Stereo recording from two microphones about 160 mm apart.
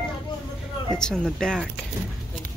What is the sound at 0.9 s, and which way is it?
Speech, 5° left (ahead or behind).